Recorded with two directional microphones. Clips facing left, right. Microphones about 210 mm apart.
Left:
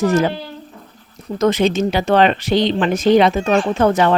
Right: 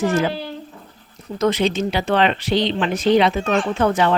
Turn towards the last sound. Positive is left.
turn(degrees=45)  # may be behind; listen again after turning